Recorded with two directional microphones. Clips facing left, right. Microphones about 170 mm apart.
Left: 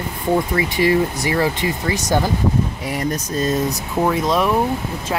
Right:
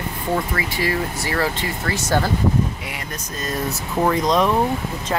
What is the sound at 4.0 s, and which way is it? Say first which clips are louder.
Speech: even; 5° left (ahead or behind).